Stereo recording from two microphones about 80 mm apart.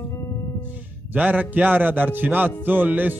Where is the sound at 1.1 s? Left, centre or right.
Right.